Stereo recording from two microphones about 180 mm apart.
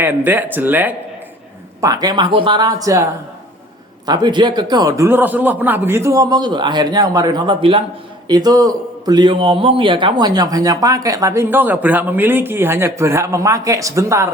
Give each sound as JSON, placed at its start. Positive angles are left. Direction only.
{"t": 0.0, "sound": "a man's voice", "side_deg": -10}
{"t": 4.0, "sound": "a man's voice", "side_deg": -25}